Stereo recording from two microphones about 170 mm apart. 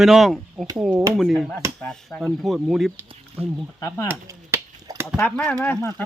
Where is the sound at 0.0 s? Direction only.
Centre (ahead or behind).